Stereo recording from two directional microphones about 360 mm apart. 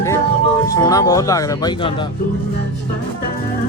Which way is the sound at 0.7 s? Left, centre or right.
Centre.